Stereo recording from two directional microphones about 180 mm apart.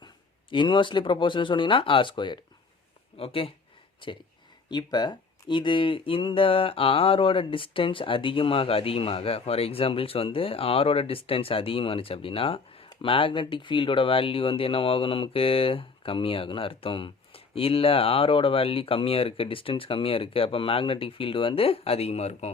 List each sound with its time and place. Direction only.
0.5 s speech: 25° left (ahead or behind)